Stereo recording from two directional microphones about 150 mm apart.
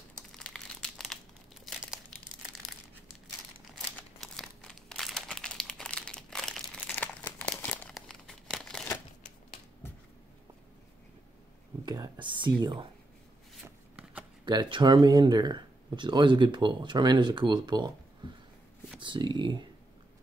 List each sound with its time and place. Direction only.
0.3 s crumpling: 5° left (ahead or behind)
3.7 s crumpling: centre (ahead or behind)
11.8 s whispering: 25° right (ahead or behind)
13.6 s shuffling cards: 5° right (ahead or behind)
14.4 s speech: 30° right (ahead or behind)